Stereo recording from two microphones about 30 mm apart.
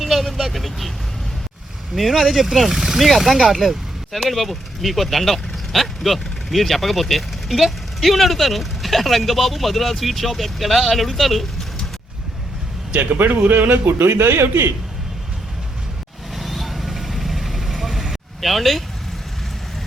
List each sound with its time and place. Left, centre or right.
0.0 s vehicle: centre
2.0 s speech: centre
3.0 s speech: centre
12.9 s speech: right
16.3 s vehicle: centre